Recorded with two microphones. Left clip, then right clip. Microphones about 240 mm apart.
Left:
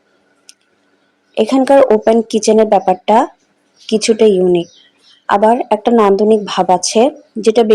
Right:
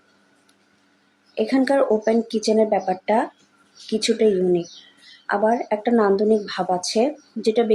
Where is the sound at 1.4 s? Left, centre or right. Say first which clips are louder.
Left 10 dB; left.